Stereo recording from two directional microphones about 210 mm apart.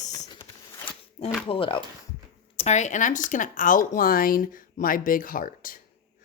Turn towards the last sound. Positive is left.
turn(degrees=40)  # may be behind; listen again after turning